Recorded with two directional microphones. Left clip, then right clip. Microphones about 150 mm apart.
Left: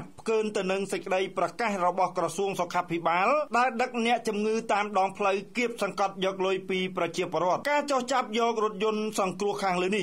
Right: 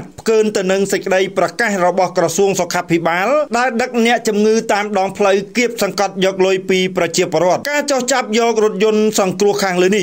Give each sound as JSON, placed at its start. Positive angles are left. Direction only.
{"t": 0.3, "sound": "speech", "side_deg": -25}